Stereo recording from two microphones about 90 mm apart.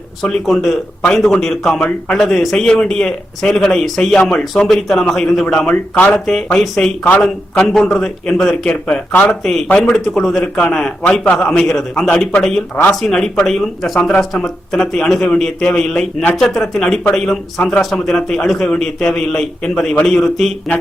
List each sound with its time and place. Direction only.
0.2 s a man's voice: 5° left (ahead or behind)
11.6 s a man's voice: centre (ahead or behind)
12.7 s speech: 20° left (ahead or behind)
13.0 s a man's voice: 5° left (ahead or behind)